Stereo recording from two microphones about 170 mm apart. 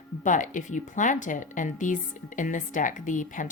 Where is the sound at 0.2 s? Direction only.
45° left (ahead or behind).